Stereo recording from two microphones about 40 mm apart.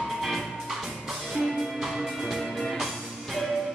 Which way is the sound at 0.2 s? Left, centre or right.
Centre.